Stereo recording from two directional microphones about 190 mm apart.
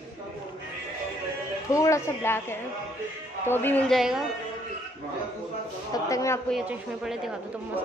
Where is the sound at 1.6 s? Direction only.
15° left (ahead or behind); by 4.3 s centre (ahead or behind).